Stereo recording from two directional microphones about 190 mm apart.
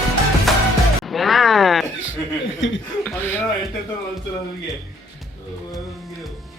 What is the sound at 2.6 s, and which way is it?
Speech, 80° left.